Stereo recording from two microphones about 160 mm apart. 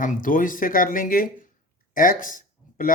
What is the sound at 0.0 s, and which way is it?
Speech, 55° left (ahead or behind).